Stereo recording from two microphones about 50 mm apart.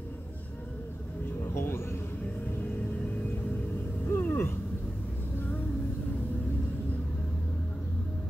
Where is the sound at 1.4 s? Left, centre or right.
Left.